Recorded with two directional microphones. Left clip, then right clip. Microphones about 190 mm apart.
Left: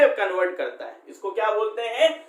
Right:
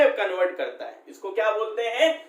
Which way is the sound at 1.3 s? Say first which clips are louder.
Left 1 dB; 15° left (ahead or behind).